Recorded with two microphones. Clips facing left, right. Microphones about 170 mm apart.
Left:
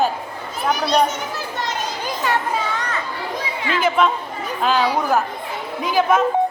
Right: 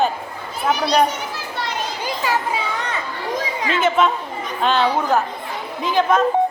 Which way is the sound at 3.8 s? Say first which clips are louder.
Even; centre (ahead or behind).